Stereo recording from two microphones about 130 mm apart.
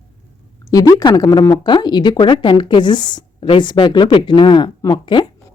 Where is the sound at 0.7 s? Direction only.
30° left (ahead or behind).